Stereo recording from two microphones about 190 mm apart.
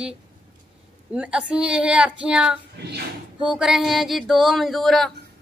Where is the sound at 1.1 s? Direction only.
5° right (ahead or behind).